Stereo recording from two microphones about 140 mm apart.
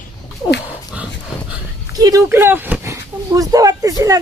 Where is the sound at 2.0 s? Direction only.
20° right (ahead or behind).